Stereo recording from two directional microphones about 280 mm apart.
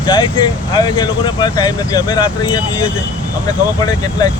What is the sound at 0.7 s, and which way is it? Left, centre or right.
Speech, centre.